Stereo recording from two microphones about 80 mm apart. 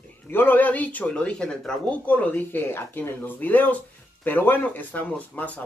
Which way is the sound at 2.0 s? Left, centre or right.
Centre.